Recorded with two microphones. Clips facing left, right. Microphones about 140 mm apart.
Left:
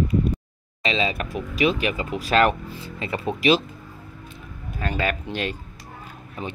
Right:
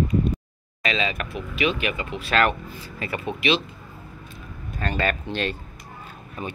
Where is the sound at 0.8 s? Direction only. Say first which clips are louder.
Left 2 dB; 30° left (ahead or behind).